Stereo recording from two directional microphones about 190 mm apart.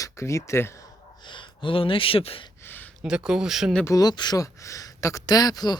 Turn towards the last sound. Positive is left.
turn(degrees=20)  # may be behind; listen again after turning